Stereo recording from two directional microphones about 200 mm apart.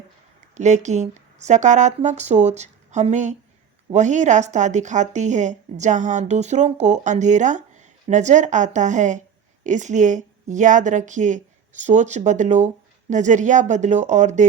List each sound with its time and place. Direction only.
0.5 s speech: 35° right (ahead or behind)